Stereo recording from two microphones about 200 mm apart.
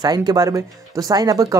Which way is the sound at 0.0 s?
20° right (ahead or behind).